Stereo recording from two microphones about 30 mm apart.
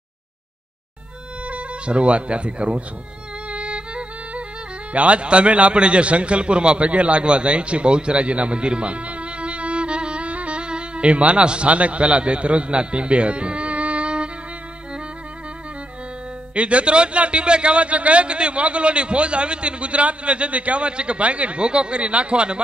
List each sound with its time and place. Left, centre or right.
1.4 s speech: right
3.4 s music: right
4.9 s a man's voice: right
16.5 s a man's voice: right